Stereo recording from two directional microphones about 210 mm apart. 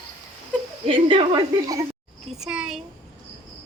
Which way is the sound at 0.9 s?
25° right (ahead or behind).